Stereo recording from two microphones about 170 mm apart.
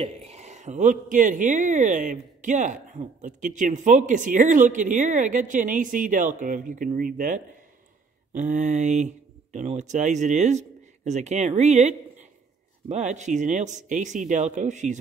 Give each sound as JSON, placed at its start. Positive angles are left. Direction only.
{"t": 0.0, "sound": "speech", "side_deg": -40}